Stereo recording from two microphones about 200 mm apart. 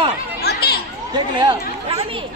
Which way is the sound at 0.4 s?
55° left (ahead or behind).